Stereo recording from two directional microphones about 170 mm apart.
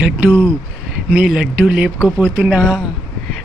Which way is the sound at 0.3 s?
10° right (ahead or behind).